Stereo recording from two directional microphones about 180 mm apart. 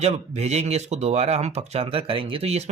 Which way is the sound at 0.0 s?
35° right (ahead or behind).